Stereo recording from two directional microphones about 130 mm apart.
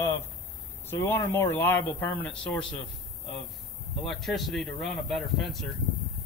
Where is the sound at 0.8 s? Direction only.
15° left (ahead or behind).